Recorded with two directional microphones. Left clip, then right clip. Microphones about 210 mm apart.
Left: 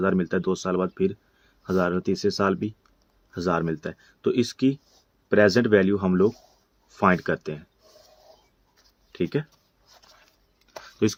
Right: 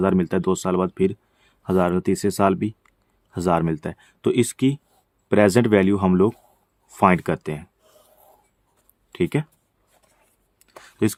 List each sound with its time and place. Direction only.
0.0 s speech: 40° right (ahead or behind)
9.1 s speech: 45° right (ahead or behind)
10.7 s a sound: 45° right (ahead or behind)